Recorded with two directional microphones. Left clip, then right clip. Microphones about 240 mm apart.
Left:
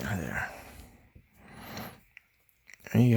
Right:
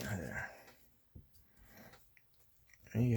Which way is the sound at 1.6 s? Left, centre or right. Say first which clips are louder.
Left 17 dB; left.